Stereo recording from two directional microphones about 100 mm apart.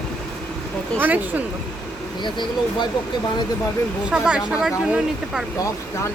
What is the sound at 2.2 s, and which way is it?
Speech, 50° left (ahead or behind).